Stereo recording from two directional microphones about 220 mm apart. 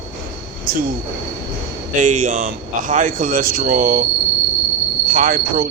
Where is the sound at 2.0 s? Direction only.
35° right (ahead or behind).